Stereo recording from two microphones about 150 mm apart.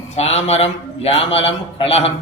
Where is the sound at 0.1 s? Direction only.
45° left (ahead or behind).